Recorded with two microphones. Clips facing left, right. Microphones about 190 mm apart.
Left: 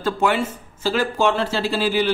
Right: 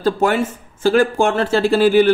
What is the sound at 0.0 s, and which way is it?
A man's voice, 45° right (ahead or behind).